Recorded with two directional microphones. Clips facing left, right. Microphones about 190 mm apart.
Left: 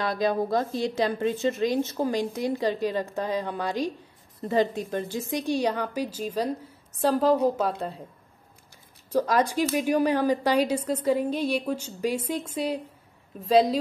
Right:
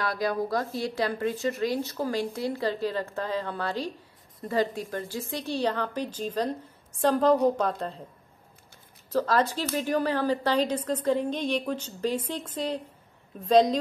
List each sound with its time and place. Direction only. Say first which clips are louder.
0.0 s a woman's voice: left 3 dB; 20° left (ahead or behind)
9.1 s a woman's voice: left 2 dB; 15° left (ahead or behind)